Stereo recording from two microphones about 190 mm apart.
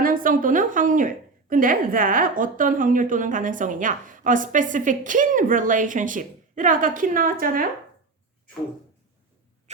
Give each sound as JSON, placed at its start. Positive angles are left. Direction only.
{"t": 0.0, "sound": "a woman's voice", "side_deg": -45}
{"t": 9.7, "sound": "rodents", "side_deg": -35}